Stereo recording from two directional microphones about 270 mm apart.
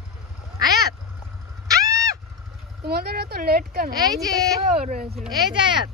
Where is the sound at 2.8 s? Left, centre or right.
Right.